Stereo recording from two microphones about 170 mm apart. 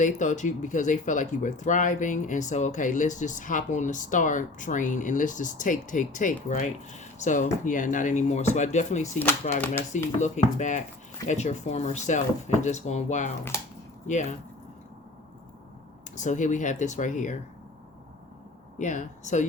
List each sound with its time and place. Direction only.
0.0 s speech: 45° left (ahead or behind)
16.1 s speech: 45° left (ahead or behind)
18.8 s speech: 45° left (ahead or behind)